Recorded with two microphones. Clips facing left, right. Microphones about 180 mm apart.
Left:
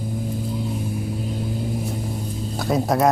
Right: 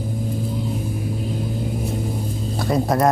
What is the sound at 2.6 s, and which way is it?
Speech, centre (ahead or behind).